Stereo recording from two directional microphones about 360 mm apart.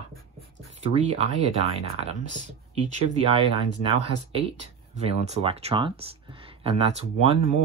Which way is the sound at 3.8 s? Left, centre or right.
Centre.